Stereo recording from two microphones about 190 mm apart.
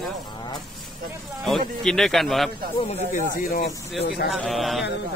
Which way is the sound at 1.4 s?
Centre (ahead or behind).